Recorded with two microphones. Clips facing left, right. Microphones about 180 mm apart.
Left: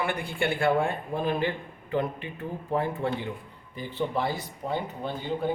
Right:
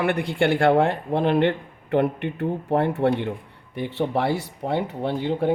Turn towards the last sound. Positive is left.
turn(degrees=-75)  # may be behind; listen again after turning